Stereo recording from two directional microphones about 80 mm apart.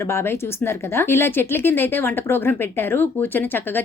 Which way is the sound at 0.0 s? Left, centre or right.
Left.